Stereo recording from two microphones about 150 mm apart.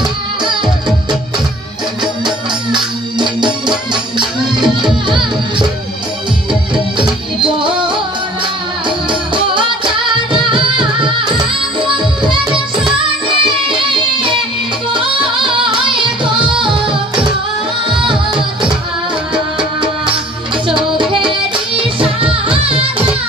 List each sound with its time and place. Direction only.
2.2 s music: 30° right (ahead or behind)
6.7 s music: 35° right (ahead or behind)
20.6 s music: 35° right (ahead or behind)